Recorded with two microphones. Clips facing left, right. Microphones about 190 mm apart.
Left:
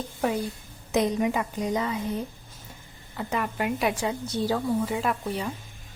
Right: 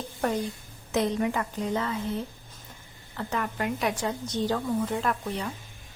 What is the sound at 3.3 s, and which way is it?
A woman's voice, 10° left (ahead or behind).